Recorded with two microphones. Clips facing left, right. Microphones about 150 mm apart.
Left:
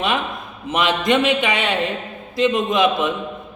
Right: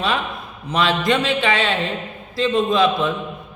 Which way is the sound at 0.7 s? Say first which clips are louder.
Left 1 dB; 20° left (ahead or behind).